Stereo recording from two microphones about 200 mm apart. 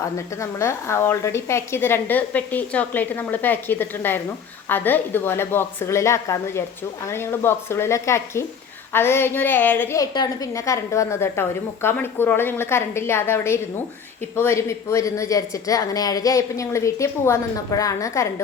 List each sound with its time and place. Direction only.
0.0 s a woman's voice: 15° left (ahead or behind)